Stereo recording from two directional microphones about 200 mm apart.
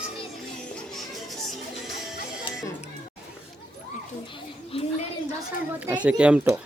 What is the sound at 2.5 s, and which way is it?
Music, 25° left (ahead or behind).